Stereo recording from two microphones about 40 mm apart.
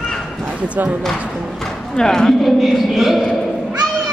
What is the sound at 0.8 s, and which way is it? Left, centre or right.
Speech, right.